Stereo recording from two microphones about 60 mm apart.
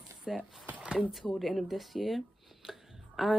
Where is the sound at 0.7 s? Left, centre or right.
Right.